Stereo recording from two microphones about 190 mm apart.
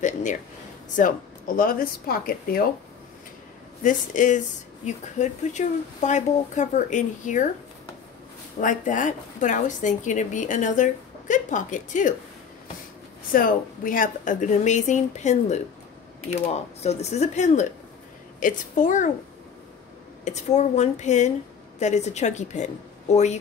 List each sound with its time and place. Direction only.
0.0 s a sound: 40° left (ahead or behind)
1.0 s speech: 45° left (ahead or behind)
3.8 s a woman's voice: 40° left (ahead or behind)
8.5 s a woman's voice: 45° left (ahead or behind)
13.3 s a woman's voice: 50° left (ahead or behind)
20.2 s a woman's voice: 35° left (ahead or behind)